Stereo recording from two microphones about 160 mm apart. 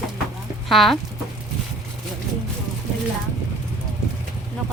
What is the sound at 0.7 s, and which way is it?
Speech, centre (ahead or behind).